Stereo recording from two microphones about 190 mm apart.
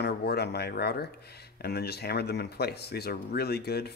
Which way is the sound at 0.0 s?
60° left (ahead or behind).